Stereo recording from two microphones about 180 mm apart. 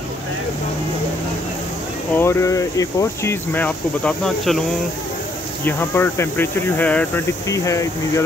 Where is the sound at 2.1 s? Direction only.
15° left (ahead or behind).